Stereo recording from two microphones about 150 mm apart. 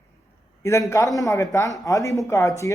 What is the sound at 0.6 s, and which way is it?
A man's voice, 15° left (ahead or behind).